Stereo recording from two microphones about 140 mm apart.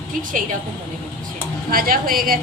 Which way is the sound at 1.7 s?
90° right.